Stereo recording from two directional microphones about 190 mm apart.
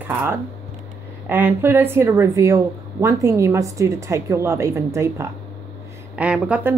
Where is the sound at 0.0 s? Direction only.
10° right (ahead or behind).